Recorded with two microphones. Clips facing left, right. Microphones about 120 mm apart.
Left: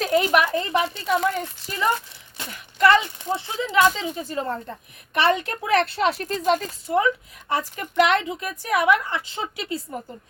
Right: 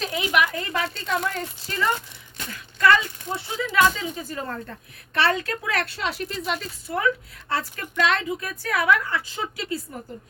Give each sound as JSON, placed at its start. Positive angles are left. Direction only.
{"t": 0.0, "sound": "a woman's voice", "side_deg": 45}
{"t": 0.5, "sound": "speech", "side_deg": 25}
{"t": 0.9, "sound": "a woman's voice", "side_deg": 10}
{"t": 6.2, "sound": "speech", "side_deg": 40}
{"t": 6.8, "sound": "speech", "side_deg": 20}